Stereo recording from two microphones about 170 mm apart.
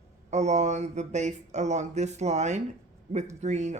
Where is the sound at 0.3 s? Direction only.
40° right (ahead or behind).